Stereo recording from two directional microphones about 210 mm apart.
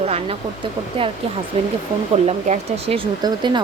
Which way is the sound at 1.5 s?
30° right (ahead or behind).